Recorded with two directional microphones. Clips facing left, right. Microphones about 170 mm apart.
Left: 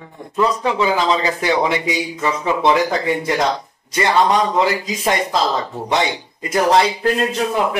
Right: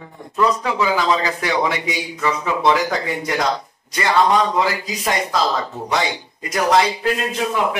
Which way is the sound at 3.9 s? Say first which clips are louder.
Left 1 dB; 25° left (ahead or behind).